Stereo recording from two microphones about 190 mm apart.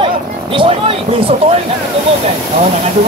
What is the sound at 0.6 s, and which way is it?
Vehicle, 30° right (ahead or behind).